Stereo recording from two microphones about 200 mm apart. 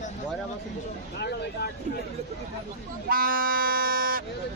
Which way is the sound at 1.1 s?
55° left (ahead or behind).